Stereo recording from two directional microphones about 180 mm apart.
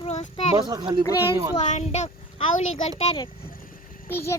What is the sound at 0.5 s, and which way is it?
Speech, 25° right (ahead or behind).